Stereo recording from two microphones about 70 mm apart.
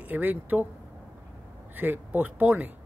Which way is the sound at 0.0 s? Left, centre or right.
Right.